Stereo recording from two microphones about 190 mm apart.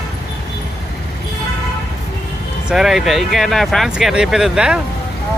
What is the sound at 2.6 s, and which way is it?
Speech, centre (ahead or behind).